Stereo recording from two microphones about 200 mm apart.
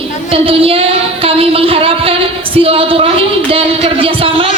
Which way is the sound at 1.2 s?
30° right (ahead or behind).